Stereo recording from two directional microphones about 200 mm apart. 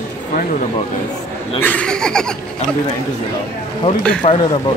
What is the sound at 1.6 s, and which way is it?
Speech, 5° left (ahead or behind).